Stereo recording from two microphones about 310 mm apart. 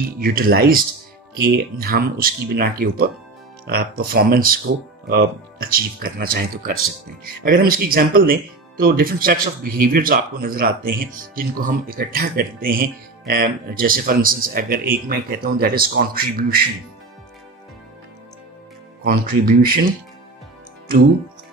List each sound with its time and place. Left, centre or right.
0.2 s speech: right
19.0 s speech: right